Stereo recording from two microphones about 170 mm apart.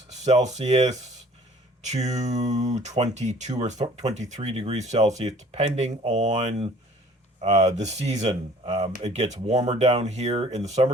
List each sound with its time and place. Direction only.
0.1 s speech: 40° right (ahead or behind)